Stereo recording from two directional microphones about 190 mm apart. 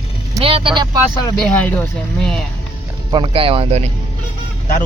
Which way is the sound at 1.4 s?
5° left (ahead or behind).